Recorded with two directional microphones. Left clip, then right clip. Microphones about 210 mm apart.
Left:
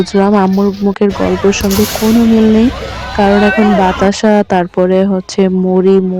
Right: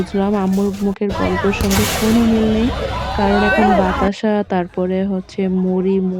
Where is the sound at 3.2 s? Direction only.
30° left (ahead or behind).